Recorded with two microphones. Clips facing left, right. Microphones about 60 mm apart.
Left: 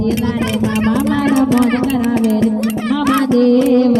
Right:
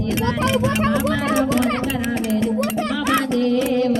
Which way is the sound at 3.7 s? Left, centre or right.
Left.